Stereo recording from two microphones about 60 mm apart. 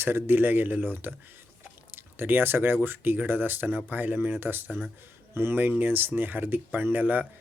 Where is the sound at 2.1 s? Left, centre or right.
Right.